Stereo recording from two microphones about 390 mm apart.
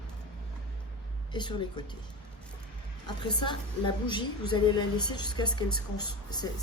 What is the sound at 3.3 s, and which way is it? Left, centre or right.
A woman's voice, centre.